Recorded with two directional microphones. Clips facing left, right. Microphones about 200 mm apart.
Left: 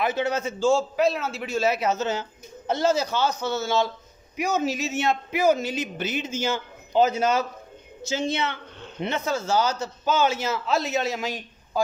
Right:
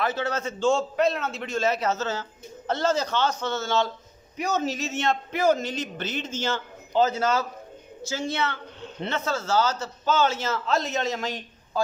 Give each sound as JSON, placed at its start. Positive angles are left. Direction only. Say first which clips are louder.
{"t": 0.0, "sound": "a man's voice", "louder": "left 2 dB", "side_deg": 15}